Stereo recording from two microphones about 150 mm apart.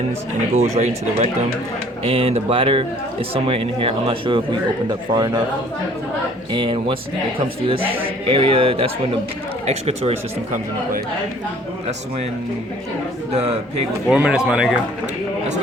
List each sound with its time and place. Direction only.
0.5 s speech: 45° right (ahead or behind); by 5.4 s 30° right (ahead or behind)
6.5 s speech: 35° right (ahead or behind)
13.3 s speech: 45° right (ahead or behind)
14.1 s speech: 5° right (ahead or behind)